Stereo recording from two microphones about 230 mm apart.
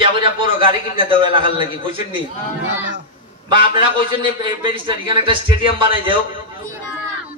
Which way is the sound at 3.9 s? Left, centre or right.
Right.